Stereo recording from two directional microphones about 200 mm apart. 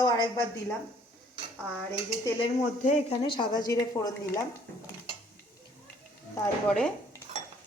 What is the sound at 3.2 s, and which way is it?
Speech, 20° left (ahead or behind).